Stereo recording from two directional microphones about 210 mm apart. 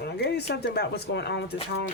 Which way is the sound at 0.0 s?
50° left (ahead or behind).